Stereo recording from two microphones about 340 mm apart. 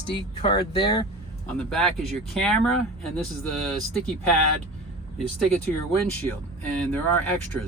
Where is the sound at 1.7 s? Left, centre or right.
Centre.